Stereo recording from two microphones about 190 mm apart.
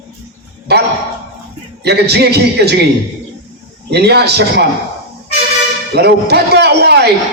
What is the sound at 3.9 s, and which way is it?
Speech, 60° right (ahead or behind).